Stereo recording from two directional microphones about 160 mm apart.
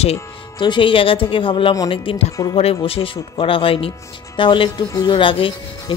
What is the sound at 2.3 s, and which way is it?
Speech, 25° left (ahead or behind).